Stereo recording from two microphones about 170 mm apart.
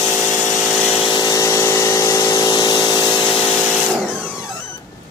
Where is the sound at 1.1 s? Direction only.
20° left (ahead or behind).